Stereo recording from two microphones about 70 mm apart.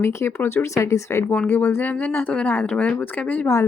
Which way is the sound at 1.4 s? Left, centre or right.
Left.